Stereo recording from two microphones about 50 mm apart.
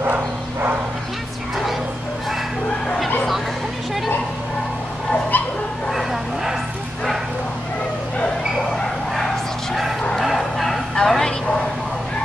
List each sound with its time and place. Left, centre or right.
0.0 s a sound: right
5.3 s dog: left
5.9 s vehicle: centre
10.1 s vehicle: centre